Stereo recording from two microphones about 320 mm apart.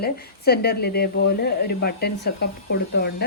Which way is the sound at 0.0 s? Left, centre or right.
Left.